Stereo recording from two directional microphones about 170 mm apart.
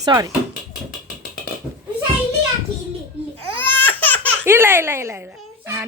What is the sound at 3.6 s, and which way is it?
Laughter, 10° left (ahead or behind).